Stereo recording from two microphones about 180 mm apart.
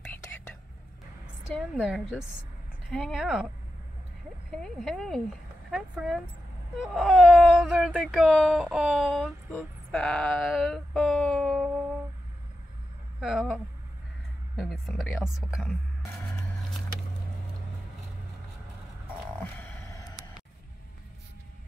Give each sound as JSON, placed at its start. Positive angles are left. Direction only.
{"t": 1.5, "sound": "speech", "side_deg": 0}
{"t": 4.6, "sound": "speech", "side_deg": 0}
{"t": 13.2, "sound": "speech", "side_deg": 0}
{"t": 14.6, "sound": "speech", "side_deg": 0}
{"t": 19.4, "sound": "a sound", "side_deg": 10}